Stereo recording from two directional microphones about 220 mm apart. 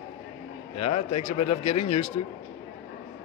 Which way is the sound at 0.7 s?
30° left (ahead or behind).